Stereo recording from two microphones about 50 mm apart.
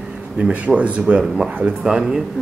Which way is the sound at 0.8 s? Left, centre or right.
Right.